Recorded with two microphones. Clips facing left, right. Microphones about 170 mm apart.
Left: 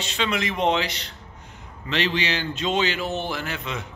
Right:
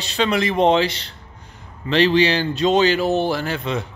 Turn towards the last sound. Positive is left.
turn(degrees=-35)  # may be behind; listen again after turning